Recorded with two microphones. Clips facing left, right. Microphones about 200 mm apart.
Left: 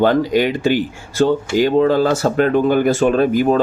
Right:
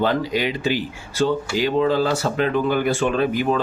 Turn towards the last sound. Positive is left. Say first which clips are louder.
# left 6 dB
turn(degrees=45)  # may be behind; listen again after turning